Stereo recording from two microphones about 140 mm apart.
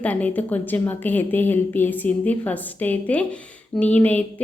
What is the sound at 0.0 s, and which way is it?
Speech, 10° left (ahead or behind).